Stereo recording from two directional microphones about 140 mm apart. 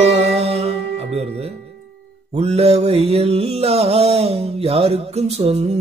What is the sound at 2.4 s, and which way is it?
Mantra, 50° right (ahead or behind).